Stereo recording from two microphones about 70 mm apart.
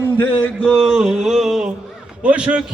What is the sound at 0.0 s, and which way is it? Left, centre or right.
Speech, left.